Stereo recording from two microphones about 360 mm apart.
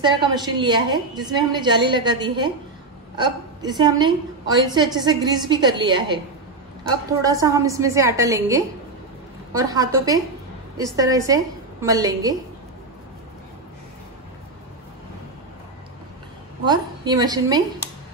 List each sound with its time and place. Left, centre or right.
0.0 s a woman's voice: centre
16.6 s a woman's voice: centre